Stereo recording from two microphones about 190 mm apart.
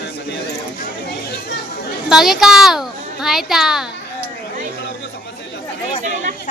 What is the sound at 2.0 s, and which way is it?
A child's voice, centre (ahead or behind).